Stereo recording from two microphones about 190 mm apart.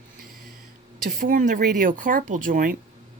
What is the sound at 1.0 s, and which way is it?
Speech, 45° right (ahead or behind).